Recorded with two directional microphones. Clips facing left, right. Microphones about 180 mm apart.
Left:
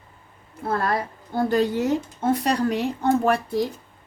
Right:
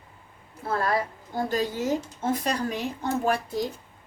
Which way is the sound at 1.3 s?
65° left (ahead or behind).